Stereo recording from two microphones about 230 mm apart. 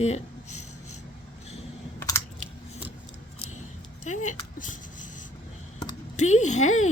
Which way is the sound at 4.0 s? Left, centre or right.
Left.